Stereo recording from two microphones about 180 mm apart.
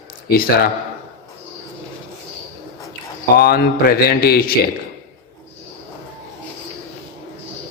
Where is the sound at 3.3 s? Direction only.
60° left (ahead or behind).